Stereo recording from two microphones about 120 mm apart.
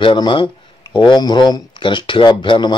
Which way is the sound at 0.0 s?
45° left (ahead or behind).